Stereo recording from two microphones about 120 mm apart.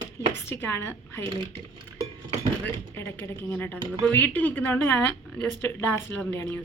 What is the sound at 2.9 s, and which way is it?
Speech, 20° left (ahead or behind).